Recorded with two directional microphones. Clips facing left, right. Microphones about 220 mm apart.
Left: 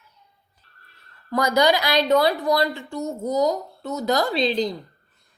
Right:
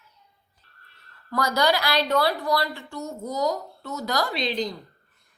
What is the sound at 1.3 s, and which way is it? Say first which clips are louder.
A woman's voice: left 4 dB; 20° left (ahead or behind).